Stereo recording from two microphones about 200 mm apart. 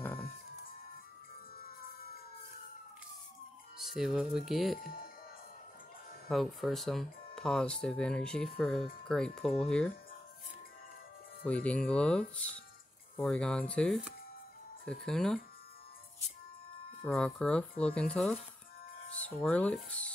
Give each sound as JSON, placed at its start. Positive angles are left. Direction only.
{"t": 3.7, "sound": "speech", "side_deg": 0}
{"t": 4.7, "sound": "speech", "side_deg": 45}
{"t": 6.2, "sound": "speech", "side_deg": 0}
{"t": 11.4, "sound": "speech", "side_deg": 5}
{"t": 17.0, "sound": "speech", "side_deg": 5}